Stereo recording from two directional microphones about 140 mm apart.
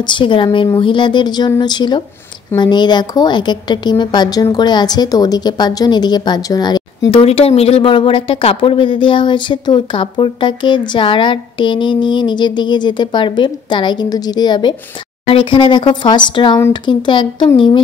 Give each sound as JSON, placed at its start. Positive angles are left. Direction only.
{"t": 0.0, "sound": "a woman's voice", "side_deg": 35}